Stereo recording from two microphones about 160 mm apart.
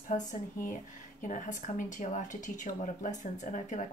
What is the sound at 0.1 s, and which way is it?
Speech, 50° left (ahead or behind).